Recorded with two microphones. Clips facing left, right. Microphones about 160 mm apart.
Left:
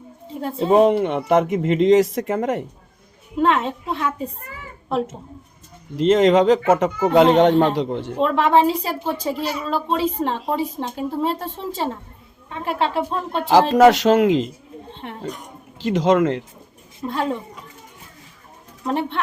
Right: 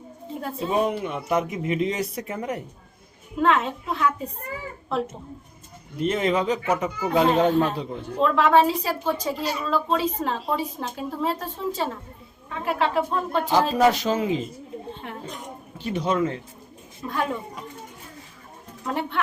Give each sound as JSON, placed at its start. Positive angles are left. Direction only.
{"t": 0.4, "sound": "a woman's voice", "side_deg": 25}
{"t": 0.7, "sound": "speech", "side_deg": 80}
{"t": 3.3, "sound": "a woman's voice", "side_deg": 30}
{"t": 6.0, "sound": "speech", "side_deg": 90}
{"t": 8.2, "sound": "a woman's voice", "side_deg": 25}
{"t": 13.5, "sound": "speech", "side_deg": 90}
{"t": 15.8, "sound": "speech", "side_deg": 90}
{"t": 17.1, "sound": "a woman's voice", "side_deg": 25}
{"t": 18.9, "sound": "a woman's voice", "side_deg": 25}